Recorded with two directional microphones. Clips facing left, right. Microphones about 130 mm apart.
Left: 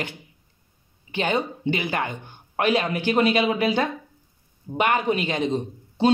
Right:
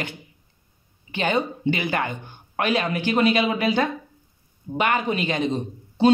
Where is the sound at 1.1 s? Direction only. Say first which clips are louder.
Right 1 dB; 30° left (ahead or behind).